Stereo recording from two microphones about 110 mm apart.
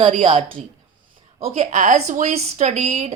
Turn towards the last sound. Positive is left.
turn(degrees=-80)